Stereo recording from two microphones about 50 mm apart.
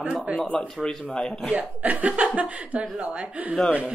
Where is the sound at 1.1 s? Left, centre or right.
Centre.